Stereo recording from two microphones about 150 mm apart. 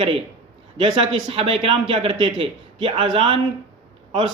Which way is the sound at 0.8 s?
35° right (ahead or behind).